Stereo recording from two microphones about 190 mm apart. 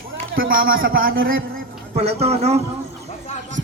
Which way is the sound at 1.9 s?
35° right (ahead or behind).